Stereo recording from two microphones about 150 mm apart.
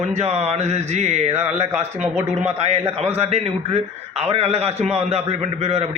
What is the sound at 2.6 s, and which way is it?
A man's voice, 45° right (ahead or behind).